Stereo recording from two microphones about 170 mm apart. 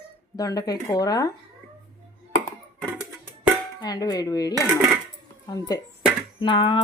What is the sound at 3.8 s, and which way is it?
Speech, 25° left (ahead or behind).